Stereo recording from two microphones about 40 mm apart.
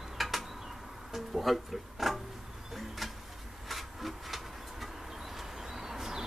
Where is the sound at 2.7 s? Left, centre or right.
Centre.